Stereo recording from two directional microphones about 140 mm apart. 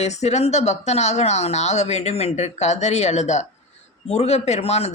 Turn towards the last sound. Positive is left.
turn(degrees=50)  # may be behind; listen again after turning